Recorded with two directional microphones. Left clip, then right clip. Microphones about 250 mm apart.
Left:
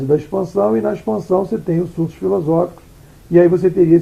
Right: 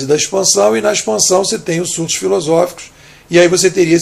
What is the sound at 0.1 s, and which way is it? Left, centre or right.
Speech, right.